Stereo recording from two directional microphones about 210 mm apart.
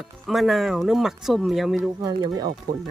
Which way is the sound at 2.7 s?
40° right (ahead or behind).